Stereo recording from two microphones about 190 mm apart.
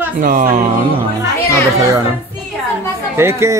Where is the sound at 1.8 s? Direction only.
15° right (ahead or behind).